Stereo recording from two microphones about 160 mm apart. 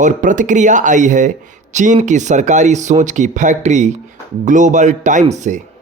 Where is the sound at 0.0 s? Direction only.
50° right (ahead or behind).